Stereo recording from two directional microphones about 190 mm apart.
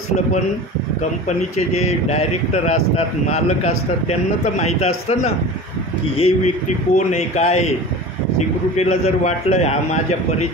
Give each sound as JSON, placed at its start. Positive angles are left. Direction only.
{"t": 1.8, "sound": "speech", "side_deg": 35}
{"t": 8.7, "sound": "speech", "side_deg": 35}